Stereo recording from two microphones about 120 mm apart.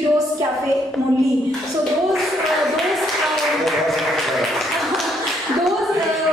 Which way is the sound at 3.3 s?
Centre (ahead or behind).